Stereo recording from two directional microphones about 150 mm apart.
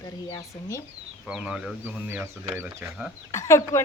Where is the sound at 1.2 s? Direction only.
5° right (ahead or behind).